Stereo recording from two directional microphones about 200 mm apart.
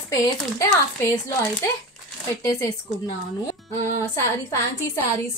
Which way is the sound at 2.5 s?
15° left (ahead or behind).